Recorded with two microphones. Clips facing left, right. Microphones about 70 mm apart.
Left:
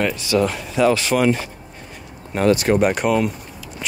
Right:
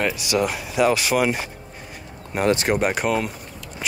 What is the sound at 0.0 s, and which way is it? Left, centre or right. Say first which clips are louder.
Speech: left 3 dB; centre.